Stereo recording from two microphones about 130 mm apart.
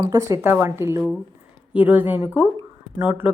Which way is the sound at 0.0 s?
25° right (ahead or behind).